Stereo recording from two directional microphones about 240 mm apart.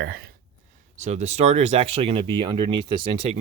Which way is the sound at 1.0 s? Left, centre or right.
Right.